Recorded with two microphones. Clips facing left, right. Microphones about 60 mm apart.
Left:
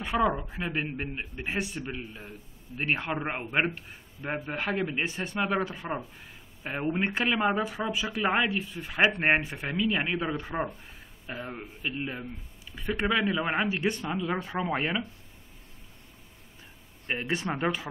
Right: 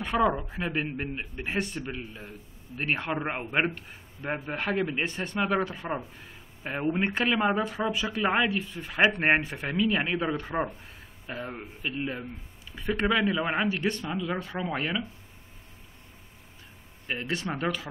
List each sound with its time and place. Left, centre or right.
0.0 s speech: centre
17.1 s speech: left